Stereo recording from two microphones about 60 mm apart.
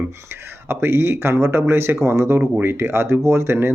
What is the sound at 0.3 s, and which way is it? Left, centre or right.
Speech, right.